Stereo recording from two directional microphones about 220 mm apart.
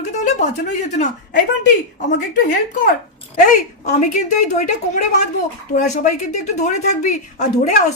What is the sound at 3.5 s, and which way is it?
Speech, 35° left (ahead or behind).